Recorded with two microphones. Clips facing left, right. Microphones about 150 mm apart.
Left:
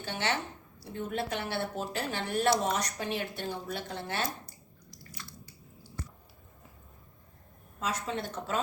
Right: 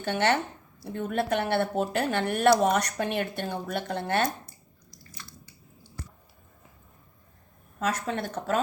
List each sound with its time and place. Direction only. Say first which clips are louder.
0.0 s speech: right 8 dB; 60° right (ahead or behind)
7.8 s speech: right 5 dB; 60° right (ahead or behind)